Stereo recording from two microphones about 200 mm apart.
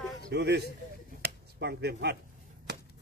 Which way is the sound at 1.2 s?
55° right (ahead or behind).